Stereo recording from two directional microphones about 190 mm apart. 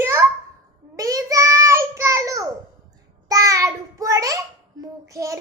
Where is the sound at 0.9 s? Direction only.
15° right (ahead or behind).